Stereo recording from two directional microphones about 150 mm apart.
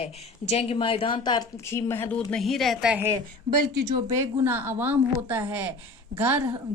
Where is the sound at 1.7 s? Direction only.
15° left (ahead or behind).